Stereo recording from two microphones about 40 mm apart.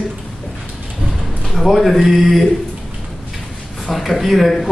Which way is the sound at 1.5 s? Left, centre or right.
Centre.